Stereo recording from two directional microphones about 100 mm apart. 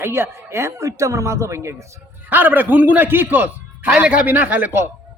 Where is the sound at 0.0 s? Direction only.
25° right (ahead or behind).